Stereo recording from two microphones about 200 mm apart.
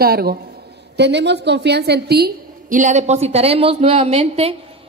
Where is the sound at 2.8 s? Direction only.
35° right (ahead or behind).